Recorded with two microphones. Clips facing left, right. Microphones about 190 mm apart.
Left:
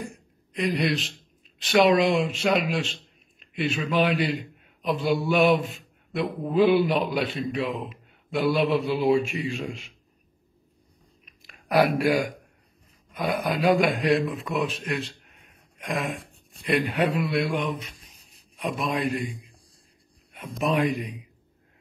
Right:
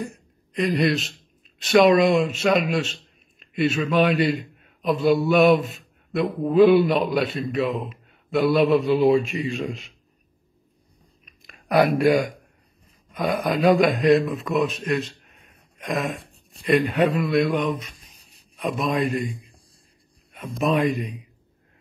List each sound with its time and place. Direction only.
0.0 s a woman's voice: 10° left (ahead or behind)
12.0 s a man's voice: 5° left (ahead or behind)
20.3 s speech: 10° left (ahead or behind)